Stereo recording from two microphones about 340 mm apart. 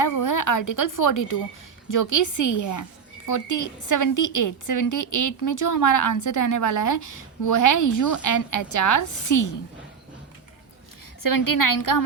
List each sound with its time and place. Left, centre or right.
0.0 s a woman's voice: left
11.2 s a woman's voice: left